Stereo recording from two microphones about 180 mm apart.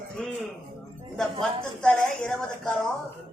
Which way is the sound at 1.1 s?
Centre (ahead or behind).